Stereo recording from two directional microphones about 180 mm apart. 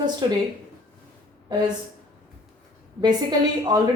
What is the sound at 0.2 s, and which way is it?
Speech, 25° right (ahead or behind).